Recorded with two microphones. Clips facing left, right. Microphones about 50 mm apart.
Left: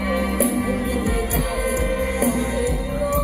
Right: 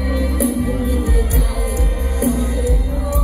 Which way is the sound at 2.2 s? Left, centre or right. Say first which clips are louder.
Right 5 dB; left.